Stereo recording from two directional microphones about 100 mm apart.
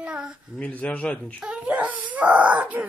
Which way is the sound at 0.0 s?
10° right (ahead or behind).